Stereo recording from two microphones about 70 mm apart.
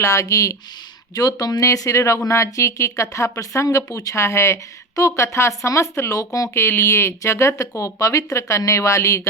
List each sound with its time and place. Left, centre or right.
0.0 s speech: left
1.1 s speech: left
6.5 s speech: left